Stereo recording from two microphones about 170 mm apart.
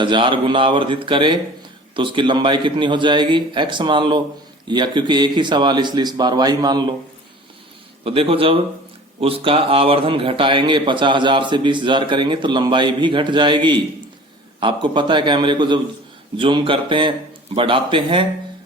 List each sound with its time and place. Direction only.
0.0 s a man's voice: 30° right (ahead or behind)
8.0 s a man's voice: 35° right (ahead or behind)